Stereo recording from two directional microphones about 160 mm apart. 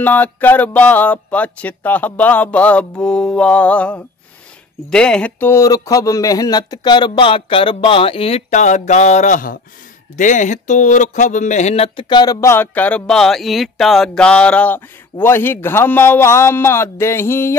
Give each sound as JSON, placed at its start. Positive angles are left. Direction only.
{"t": 0.0, "sound": "speech", "side_deg": 10}
{"t": 12.1, "sound": "speech", "side_deg": 25}